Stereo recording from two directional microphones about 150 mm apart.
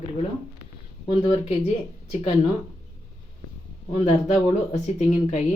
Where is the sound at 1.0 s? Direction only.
45° left (ahead or behind).